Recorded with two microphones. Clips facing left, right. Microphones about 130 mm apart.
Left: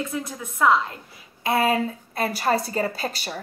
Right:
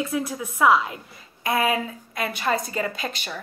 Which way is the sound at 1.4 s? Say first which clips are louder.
Left 2 dB; 30° left (ahead or behind).